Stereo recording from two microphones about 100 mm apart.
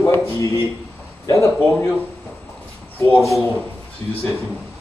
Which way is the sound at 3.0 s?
20° left (ahead or behind).